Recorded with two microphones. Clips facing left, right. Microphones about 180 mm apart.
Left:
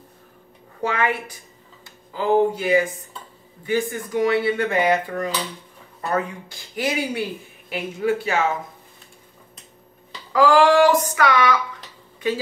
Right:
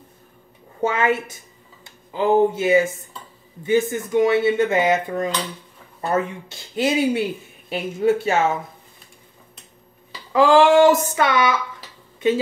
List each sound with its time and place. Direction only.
0.7 s dishes: 25° right (ahead or behind)
1.9 s speech: 20° right (ahead or behind)
3.6 s dishes: 20° right (ahead or behind)
10.3 s dishes: 25° right (ahead or behind)